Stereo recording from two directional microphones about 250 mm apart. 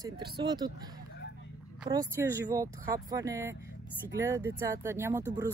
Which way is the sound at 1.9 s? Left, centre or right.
Centre.